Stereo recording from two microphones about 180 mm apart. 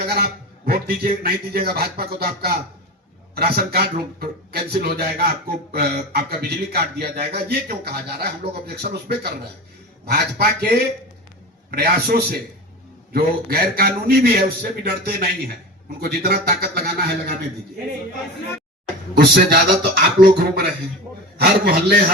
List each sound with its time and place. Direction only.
0.0 s a man's voice: 60° right (ahead or behind)
19.1 s a man's voice: 65° right (ahead or behind)